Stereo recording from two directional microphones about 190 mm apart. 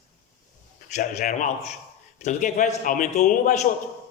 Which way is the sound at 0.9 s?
40° left (ahead or behind).